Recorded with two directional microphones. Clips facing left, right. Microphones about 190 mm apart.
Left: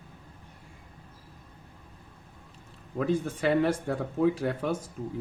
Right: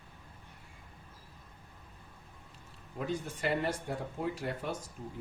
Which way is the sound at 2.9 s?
90° left.